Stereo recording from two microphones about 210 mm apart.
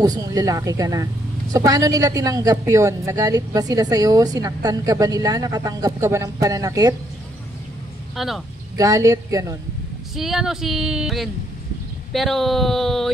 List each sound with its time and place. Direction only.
0.0 s a woman's voice: 15° right (ahead or behind)
8.2 s speech: centre (ahead or behind)
8.7 s a woman's voice: 15° right (ahead or behind)
10.1 s speech: centre (ahead or behind)